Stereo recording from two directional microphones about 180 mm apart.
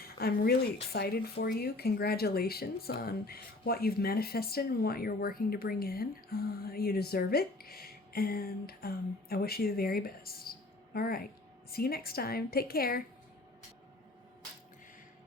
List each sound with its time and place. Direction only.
0.0 s speech: 60° left (ahead or behind)